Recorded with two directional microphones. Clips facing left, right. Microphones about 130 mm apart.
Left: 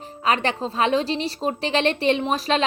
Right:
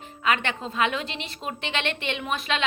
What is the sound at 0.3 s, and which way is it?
A woman's voice, 35° left (ahead or behind).